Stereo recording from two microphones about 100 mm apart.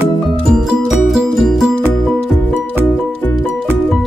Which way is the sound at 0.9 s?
5° right (ahead or behind).